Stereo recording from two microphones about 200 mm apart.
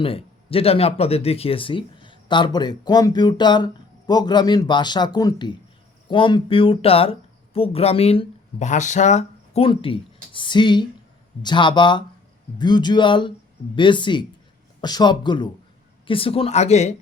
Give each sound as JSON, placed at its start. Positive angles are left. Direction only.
{"t": 0.0, "sound": "speech", "side_deg": 30}